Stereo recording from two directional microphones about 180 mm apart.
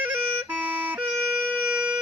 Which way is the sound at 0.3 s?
10° right (ahead or behind).